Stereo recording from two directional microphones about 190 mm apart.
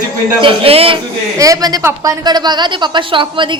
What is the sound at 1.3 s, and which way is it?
A woman's voice, 20° right (ahead or behind).